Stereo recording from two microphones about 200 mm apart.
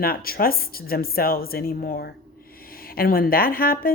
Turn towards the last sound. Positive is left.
turn(degrees=45)  # may be behind; listen again after turning